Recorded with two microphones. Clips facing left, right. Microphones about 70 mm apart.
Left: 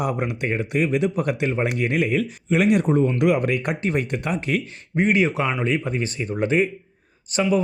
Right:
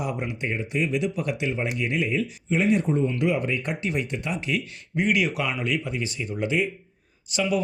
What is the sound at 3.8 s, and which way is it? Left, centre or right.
Speech, left.